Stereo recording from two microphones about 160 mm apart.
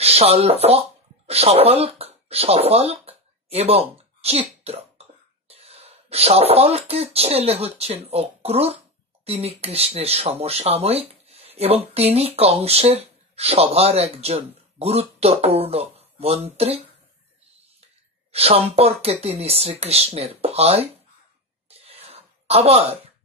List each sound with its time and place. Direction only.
0.0 s speech: 40° right (ahead or behind)
4.6 s cough: 40° right (ahead or behind)
5.5 s speech: 40° right (ahead or behind)
18.3 s speech: 40° right (ahead or behind)
21.6 s a sound: 40° right (ahead or behind)